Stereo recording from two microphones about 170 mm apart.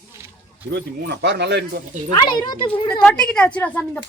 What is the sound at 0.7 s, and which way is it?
Speech, 80° right.